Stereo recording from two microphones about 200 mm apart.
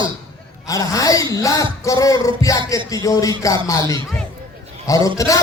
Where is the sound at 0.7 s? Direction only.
15° left (ahead or behind).